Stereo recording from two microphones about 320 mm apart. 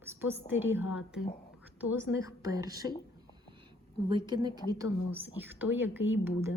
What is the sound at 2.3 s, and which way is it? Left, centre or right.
Speech, centre.